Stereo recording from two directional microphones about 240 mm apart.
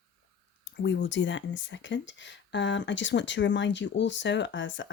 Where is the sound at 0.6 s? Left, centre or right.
Left.